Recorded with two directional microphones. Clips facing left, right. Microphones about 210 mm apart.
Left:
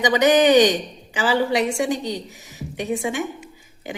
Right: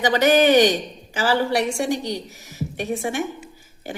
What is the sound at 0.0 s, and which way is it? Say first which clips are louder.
A woman's voice: left 1 dB; 15° left (ahead or behind).